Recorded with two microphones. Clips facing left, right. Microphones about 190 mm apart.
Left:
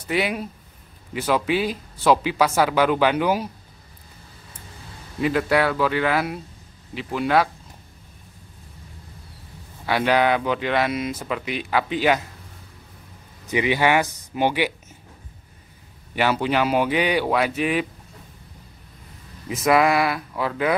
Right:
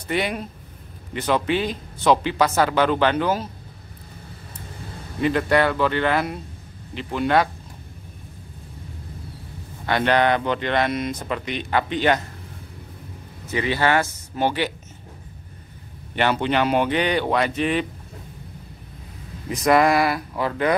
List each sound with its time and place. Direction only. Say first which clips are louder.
0.1 s speech: left 1 dB; 5° left (ahead or behind)
5.2 s speech: right 1 dB; 5° left (ahead or behind)
9.8 s speech: even; 5° left (ahead or behind)
13.5 s speech: left 1 dB; 15° left (ahead or behind)
16.2 s speech: even; 5° left (ahead or behind)
19.5 s speech: right 1 dB; 5° left (ahead or behind)